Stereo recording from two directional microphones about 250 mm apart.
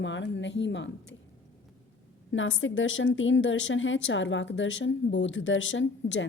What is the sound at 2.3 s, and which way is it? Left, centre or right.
A woman's voice, left.